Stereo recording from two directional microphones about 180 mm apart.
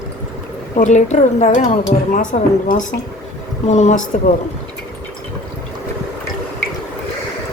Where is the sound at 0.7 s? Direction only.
40° left (ahead or behind).